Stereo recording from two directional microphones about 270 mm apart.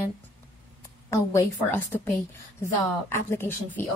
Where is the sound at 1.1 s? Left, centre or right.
Centre.